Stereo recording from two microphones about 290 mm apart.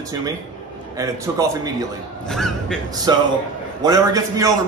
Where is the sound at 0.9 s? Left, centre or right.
Centre.